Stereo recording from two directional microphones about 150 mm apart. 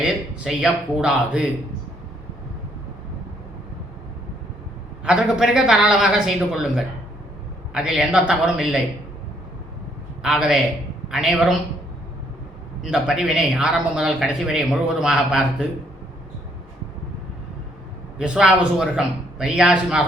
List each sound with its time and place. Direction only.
0.0 s speech: 5° right (ahead or behind)
5.0 s speech: 5° right (ahead or behind)
10.2 s speech: 5° right (ahead or behind)
12.8 s speech: 5° right (ahead or behind)
18.2 s speech: 5° right (ahead or behind)